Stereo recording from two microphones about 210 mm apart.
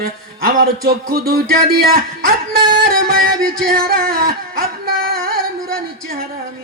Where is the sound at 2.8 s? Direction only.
45° right (ahead or behind).